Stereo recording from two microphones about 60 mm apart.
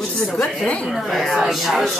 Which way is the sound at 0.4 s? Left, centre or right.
Left.